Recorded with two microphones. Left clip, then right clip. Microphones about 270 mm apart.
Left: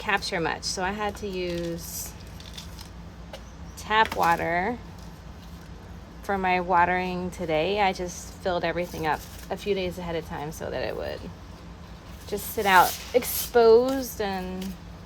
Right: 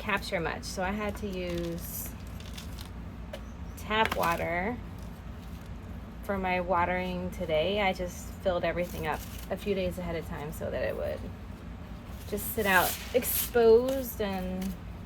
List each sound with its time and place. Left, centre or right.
0.0 s a woman's voice: left
3.8 s a woman's voice: left
6.2 s a woman's voice: left
12.3 s speech: left